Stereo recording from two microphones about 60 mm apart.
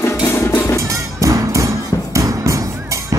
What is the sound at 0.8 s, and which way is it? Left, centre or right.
Music, right.